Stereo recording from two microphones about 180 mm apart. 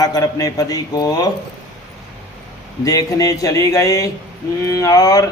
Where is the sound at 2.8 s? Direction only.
20° left (ahead or behind).